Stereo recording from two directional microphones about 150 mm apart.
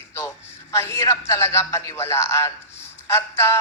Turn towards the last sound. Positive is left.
turn(degrees=20)  # may be behind; listen again after turning